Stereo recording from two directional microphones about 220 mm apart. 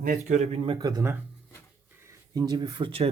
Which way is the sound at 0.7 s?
15° right (ahead or behind).